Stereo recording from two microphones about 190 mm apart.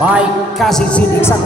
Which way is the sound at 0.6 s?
5° left (ahead or behind).